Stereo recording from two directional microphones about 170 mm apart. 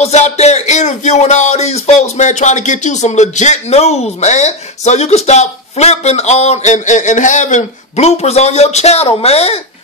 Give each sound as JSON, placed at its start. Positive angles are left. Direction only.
{"t": 0.0, "sound": "speech", "side_deg": 40}